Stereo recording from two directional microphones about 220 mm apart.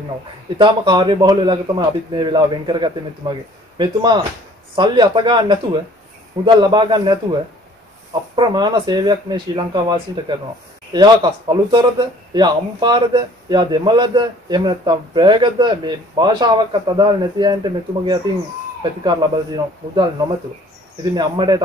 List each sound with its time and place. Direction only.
0.6 s a man's voice: 20° right (ahead or behind)